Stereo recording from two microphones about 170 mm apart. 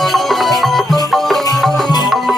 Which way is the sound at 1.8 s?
25° left (ahead or behind).